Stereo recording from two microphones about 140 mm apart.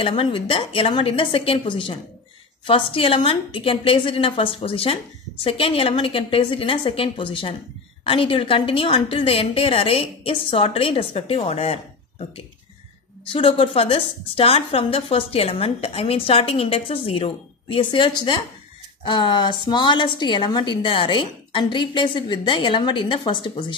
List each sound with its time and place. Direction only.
0.0 s a woman's voice: 40° left (ahead or behind)